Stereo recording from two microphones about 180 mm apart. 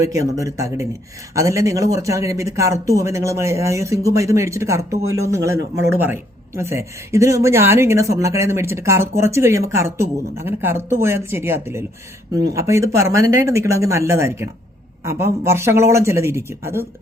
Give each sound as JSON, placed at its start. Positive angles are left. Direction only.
{"t": 0.0, "sound": "speech", "side_deg": -15}